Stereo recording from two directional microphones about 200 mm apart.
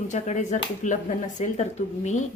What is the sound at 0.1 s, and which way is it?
Speech, 35° left (ahead or behind).